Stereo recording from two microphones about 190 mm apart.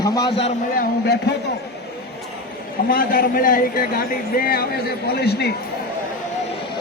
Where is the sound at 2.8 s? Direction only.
50° left (ahead or behind).